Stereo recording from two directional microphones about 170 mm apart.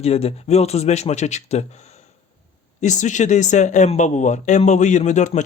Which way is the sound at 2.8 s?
45° left (ahead or behind).